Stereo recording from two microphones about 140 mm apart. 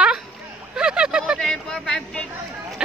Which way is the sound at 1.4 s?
5° left (ahead or behind).